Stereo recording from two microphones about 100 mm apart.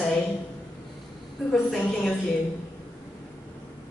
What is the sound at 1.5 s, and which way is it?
Speech, 5° left (ahead or behind).